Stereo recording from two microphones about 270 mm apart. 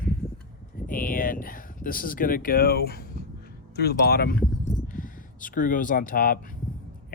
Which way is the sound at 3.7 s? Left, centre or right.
Left.